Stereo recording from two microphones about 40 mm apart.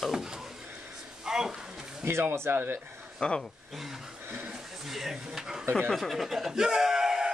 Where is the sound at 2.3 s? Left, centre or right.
Right.